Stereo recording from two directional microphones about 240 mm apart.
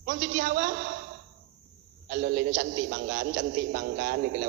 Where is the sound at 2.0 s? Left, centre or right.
Right.